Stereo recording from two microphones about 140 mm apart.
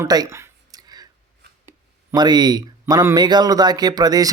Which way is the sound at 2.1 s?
30° right (ahead or behind).